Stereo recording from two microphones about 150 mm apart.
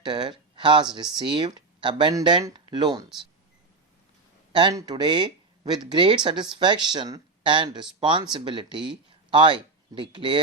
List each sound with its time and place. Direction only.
0.0 s speech: 30° right (ahead or behind)
4.5 s speech: 25° right (ahead or behind)